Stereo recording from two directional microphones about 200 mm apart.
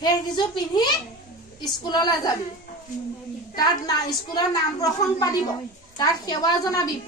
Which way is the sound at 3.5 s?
20° left (ahead or behind).